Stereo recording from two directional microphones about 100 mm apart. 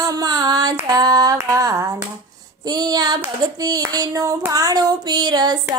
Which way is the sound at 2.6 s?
45° right (ahead or behind).